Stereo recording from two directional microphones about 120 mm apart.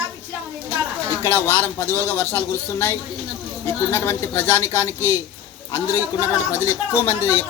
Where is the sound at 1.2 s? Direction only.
20° left (ahead or behind).